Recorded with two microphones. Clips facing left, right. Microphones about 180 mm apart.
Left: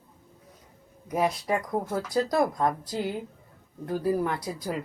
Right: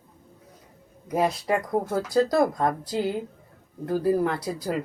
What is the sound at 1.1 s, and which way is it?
Speech, 30° right (ahead or behind).